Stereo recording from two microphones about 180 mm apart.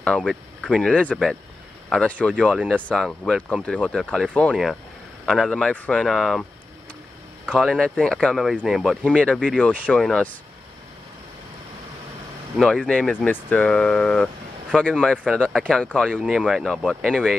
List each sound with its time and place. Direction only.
0.0 s speech: centre (ahead or behind)
7.4 s speech: centre (ahead or behind)
12.5 s speech: centre (ahead or behind)